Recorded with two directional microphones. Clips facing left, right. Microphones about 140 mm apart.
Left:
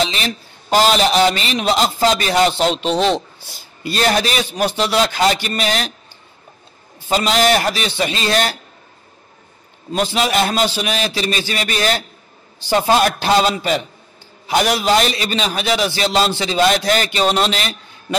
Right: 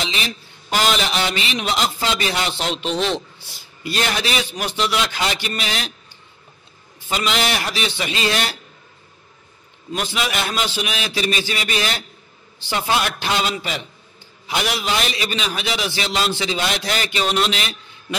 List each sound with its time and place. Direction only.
0.0 s a man's voice: 40° left (ahead or behind)
7.1 s a man's voice: 40° left (ahead or behind)
9.9 s a man's voice: 35° left (ahead or behind)